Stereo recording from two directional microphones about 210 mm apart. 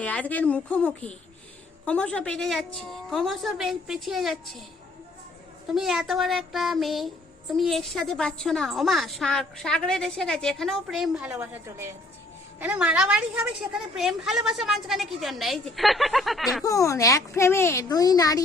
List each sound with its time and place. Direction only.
0.0 s speech: 5° left (ahead or behind)
5.7 s speech: centre (ahead or behind)
16.6 s speech: 15° left (ahead or behind)